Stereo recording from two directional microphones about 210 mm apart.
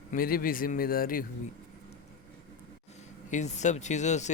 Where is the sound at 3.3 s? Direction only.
35° left (ahead or behind).